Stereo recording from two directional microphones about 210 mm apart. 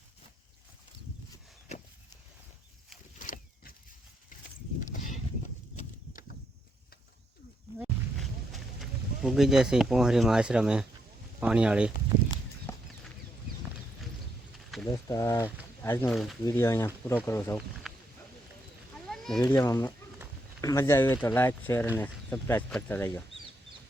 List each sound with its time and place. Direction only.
3.2 s a sound: 40° left (ahead or behind)
7.8 s a sound: centre (ahead or behind)
11.3 s speech: 5° right (ahead or behind)
12.7 s chicken: 10° left (ahead or behind)
14.8 s speech: 20° left (ahead or behind)
16.1 s speech: centre (ahead or behind)
16.4 s speech: 15° left (ahead or behind)
17.8 s a sound: centre (ahead or behind)
19.0 s cat: centre (ahead or behind)
19.5 s speech: 15° left (ahead or behind)